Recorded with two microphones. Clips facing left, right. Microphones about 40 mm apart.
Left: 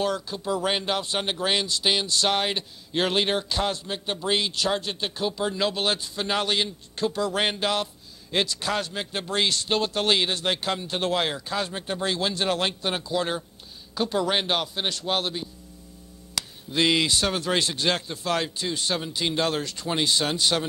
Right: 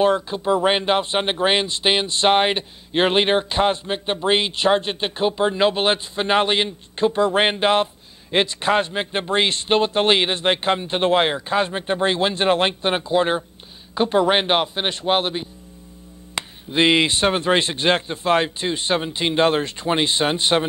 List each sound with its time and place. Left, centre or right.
0.0 s speech: right